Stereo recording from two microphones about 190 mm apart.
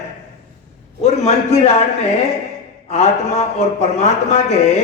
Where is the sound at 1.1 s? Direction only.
35° left (ahead or behind).